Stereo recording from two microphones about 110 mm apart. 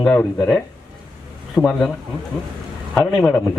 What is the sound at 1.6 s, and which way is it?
Speech, 10° right (ahead or behind).